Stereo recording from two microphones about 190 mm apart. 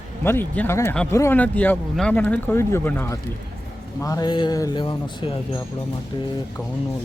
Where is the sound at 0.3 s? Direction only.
10° left (ahead or behind); by 5.4 s 25° left (ahead or behind).